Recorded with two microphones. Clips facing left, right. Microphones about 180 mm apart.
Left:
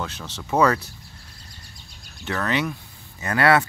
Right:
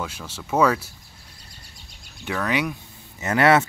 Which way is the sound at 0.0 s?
10° right (ahead or behind).